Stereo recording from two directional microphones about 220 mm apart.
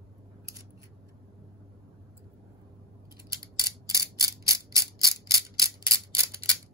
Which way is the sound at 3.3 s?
15° right (ahead or behind).